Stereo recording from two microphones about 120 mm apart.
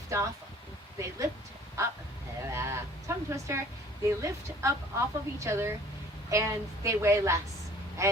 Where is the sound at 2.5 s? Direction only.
20° right (ahead or behind).